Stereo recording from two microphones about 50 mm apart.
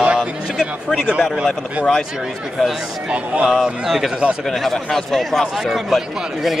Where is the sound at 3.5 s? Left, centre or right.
Centre.